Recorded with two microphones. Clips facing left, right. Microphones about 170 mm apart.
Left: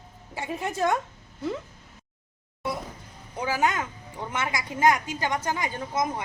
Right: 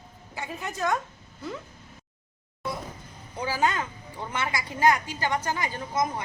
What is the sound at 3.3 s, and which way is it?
A woman's voice, 15° left (ahead or behind).